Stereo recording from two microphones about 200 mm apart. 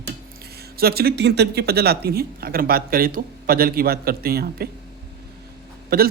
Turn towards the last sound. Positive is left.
turn(degrees=-50)  # may be behind; listen again after turning